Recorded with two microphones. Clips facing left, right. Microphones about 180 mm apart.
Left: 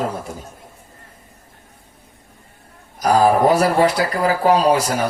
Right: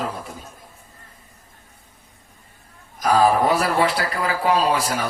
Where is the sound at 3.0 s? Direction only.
45° left (ahead or behind).